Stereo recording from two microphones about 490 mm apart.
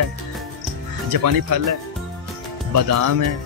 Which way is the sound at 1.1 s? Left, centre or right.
Right.